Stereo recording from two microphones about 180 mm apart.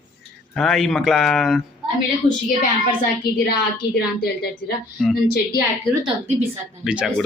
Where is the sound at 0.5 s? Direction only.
Centre (ahead or behind).